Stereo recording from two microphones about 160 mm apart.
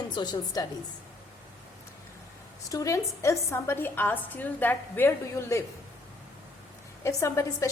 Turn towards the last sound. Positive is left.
turn(degrees=20)  # may be behind; listen again after turning